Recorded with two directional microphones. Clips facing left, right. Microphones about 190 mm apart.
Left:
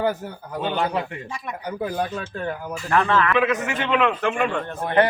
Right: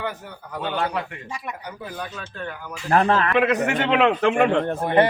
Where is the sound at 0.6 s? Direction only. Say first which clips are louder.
Left 2 dB; 20° left (ahead or behind).